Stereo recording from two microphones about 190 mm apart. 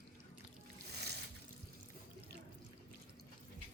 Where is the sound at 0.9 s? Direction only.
60° right (ahead or behind).